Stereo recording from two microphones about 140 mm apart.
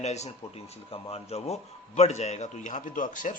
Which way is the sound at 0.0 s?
50° left (ahead or behind).